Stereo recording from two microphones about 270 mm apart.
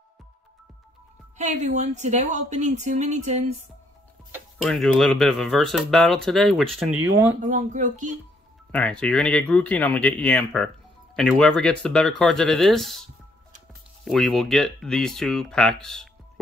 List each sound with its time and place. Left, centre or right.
1.4 s speech: right
4.3 s speech: centre
7.4 s speech: right
8.7 s speech: centre